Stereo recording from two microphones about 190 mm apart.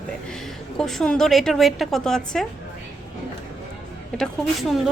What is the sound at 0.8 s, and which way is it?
A woman's voice, centre (ahead or behind).